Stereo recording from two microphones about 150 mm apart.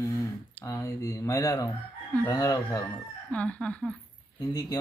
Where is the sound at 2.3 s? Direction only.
25° left (ahead or behind).